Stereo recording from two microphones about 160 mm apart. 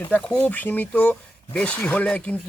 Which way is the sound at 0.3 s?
10° left (ahead or behind).